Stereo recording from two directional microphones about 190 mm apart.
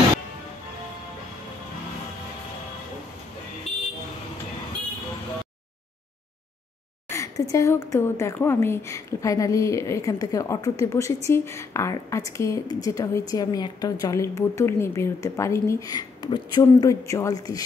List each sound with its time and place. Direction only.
7.1 s a woman's voice: 15° left (ahead or behind)